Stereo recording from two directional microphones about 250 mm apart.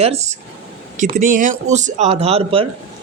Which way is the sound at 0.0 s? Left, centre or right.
Right.